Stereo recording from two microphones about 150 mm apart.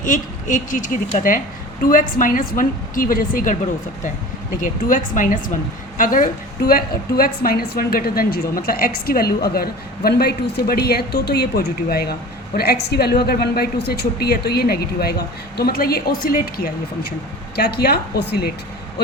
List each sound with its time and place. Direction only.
0.0 s a woman's voice: 60° left (ahead or behind)
4.6 s a woman's voice: 60° left (ahead or behind); by 16.7 s 80° left
17.6 s a woman's voice: 90° left